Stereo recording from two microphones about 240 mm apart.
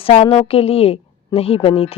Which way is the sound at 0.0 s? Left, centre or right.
Left.